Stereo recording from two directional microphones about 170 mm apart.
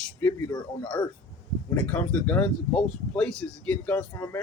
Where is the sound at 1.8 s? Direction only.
10° left (ahead or behind).